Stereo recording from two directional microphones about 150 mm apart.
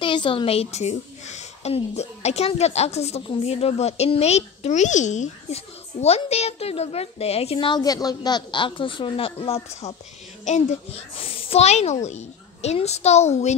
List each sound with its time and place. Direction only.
0.0 s a woman's voice: 35° left (ahead or behind)
10.4 s a woman's voice: 50° left (ahead or behind)